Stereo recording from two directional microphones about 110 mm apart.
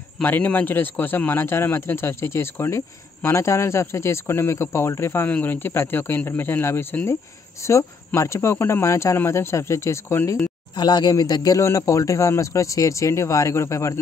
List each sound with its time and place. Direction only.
0.2 s a man's voice: 15° left (ahead or behind)
10.8 s a man's voice: 40° left (ahead or behind)